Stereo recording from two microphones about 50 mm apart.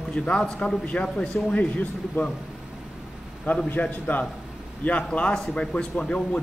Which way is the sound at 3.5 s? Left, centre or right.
Left.